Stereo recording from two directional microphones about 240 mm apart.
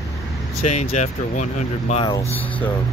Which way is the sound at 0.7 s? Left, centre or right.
Left.